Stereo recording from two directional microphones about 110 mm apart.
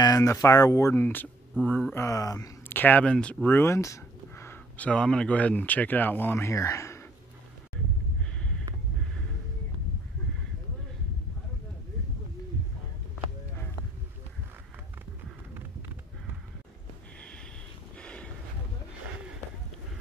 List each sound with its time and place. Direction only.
0.0 s speech: 30° left (ahead or behind)
0.9 s speech: 15° left (ahead or behind)
2.0 s speech: 30° left (ahead or behind)
2.7 s speech: 15° left (ahead or behind)
17.9 s a sound: 10° left (ahead or behind)